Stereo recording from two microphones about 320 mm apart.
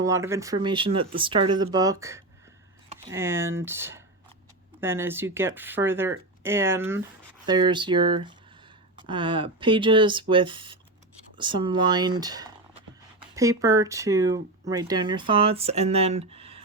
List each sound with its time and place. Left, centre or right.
0.0 s speech: centre